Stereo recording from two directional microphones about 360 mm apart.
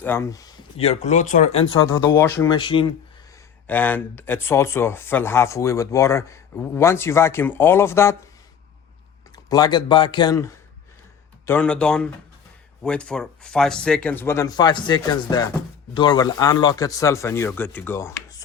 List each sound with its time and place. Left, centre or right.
0.0 s speech: centre
9.3 s speech: centre